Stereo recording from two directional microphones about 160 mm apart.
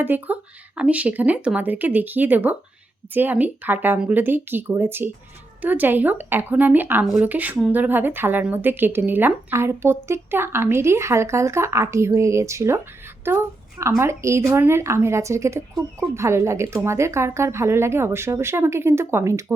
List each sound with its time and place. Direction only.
0.0 s a woman's voice: 10° right (ahead or behind)